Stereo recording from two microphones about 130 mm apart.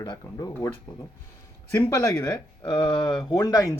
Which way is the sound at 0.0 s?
30° left (ahead or behind).